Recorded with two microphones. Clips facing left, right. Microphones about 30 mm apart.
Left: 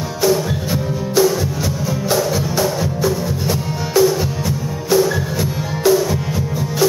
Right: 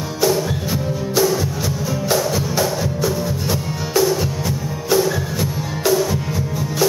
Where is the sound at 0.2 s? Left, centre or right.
Centre.